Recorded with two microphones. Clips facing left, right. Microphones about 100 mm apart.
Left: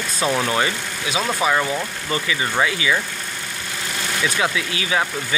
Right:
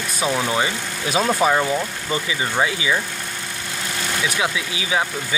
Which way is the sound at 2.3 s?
25° right (ahead or behind).